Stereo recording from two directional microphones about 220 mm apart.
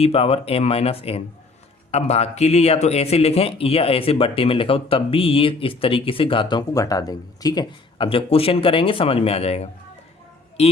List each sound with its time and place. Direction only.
0.0 s a man's voice: 25° left (ahead or behind)